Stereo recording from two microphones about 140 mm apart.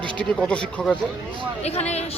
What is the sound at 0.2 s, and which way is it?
Speech, 5° left (ahead or behind).